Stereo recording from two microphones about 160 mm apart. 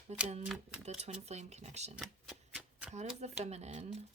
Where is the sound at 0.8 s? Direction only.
40° right (ahead or behind).